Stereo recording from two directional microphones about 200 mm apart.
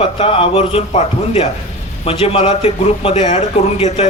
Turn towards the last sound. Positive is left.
turn(degrees=30)  # may be behind; listen again after turning